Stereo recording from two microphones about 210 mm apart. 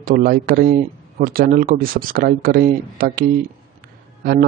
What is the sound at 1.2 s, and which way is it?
A man's voice, 45° right (ahead or behind).